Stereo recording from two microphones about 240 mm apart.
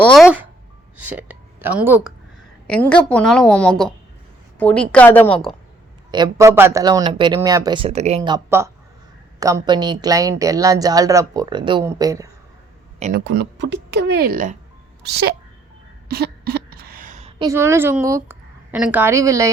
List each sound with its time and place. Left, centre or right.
0.0 s a woman's voice: centre
2.6 s a woman's voice: centre
6.1 s a woman's voice: centre
13.0 s speech: right
13.2 s a child's voice: right
16.0 s a sound: right
17.4 s a woman's voice: centre